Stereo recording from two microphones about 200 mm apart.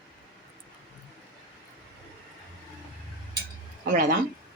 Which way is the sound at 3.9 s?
40° right (ahead or behind).